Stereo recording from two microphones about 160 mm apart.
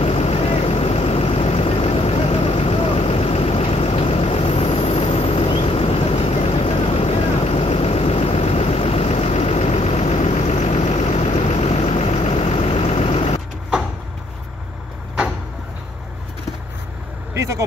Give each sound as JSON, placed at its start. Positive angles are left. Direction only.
{"t": 0.0, "sound": "vehicle", "side_deg": 40}
{"t": 17.3, "sound": "vehicle", "side_deg": -20}